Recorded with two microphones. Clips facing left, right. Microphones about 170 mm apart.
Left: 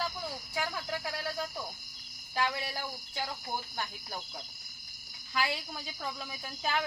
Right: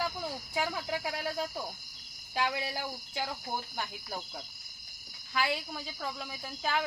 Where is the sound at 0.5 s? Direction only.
20° right (ahead or behind).